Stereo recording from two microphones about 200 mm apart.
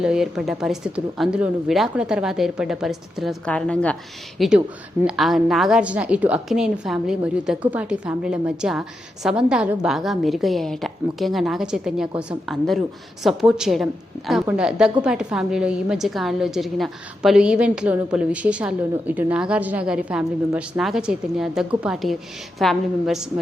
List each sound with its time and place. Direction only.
0.0 s a woman's voice: 5° right (ahead or behind)